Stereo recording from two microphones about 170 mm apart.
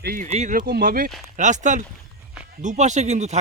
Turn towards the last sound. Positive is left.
turn(degrees=-40)  # may be behind; listen again after turning